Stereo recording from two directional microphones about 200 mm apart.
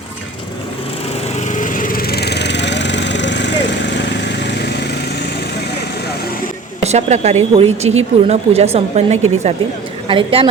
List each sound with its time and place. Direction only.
1.5 s lawn mower: 40° left (ahead or behind); by 3.5 s 60° left (ahead or behind)
3.9 s vehicle: 55° left (ahead or behind)
6.8 s a woman's voice: 35° right (ahead or behind)